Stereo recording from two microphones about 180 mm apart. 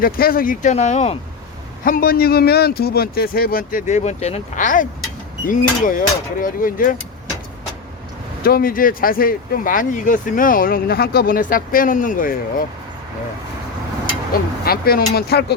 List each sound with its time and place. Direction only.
0.0 s speech: 55° left (ahead or behind)
1.8 s speech: 55° left (ahead or behind)
8.4 s speech: 55° left (ahead or behind)
14.3 s speech: 55° left (ahead or behind)